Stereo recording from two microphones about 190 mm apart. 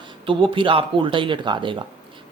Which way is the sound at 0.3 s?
25° right (ahead or behind).